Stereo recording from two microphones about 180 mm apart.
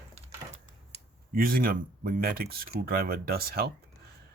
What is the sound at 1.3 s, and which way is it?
Speech, 55° right (ahead or behind).